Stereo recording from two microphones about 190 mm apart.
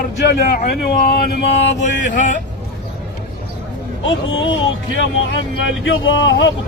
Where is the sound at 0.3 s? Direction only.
50° left (ahead or behind).